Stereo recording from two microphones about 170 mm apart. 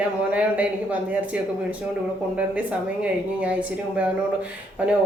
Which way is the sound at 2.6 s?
10° right (ahead or behind).